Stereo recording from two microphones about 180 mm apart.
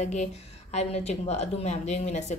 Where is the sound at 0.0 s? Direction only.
40° left (ahead or behind).